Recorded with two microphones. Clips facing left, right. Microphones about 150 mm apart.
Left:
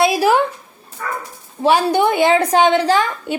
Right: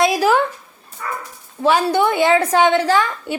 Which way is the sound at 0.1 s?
30° left (ahead or behind).